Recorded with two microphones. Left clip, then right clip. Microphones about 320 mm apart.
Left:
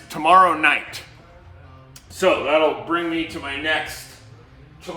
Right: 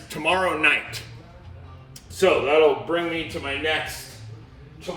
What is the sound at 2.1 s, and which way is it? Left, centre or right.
Speech, centre.